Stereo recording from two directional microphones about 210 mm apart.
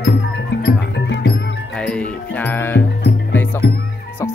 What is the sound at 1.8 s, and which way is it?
Speech, 5° left (ahead or behind).